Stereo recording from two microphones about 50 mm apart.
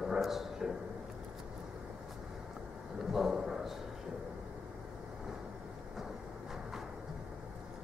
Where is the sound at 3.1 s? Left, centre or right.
Centre.